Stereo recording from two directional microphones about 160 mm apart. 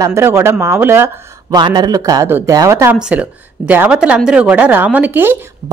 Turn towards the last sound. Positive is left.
turn(degrees=-15)  # may be behind; listen again after turning